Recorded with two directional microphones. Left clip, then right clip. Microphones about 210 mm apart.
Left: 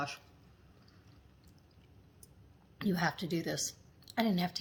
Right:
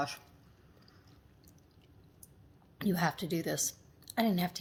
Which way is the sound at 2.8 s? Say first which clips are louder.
Right 1 dB; 20° right (ahead or behind).